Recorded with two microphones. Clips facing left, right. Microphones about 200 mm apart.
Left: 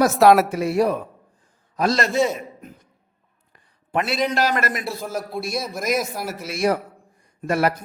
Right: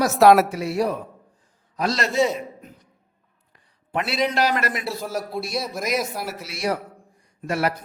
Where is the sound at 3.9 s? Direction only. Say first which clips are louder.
Left 1 dB; 50° left (ahead or behind).